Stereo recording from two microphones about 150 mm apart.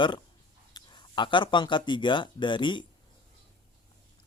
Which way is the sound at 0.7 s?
30° left (ahead or behind).